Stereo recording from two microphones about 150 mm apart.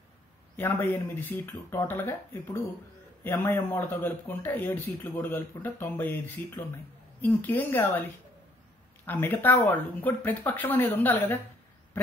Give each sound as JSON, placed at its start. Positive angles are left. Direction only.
{"t": 0.6, "sound": "speech", "side_deg": 15}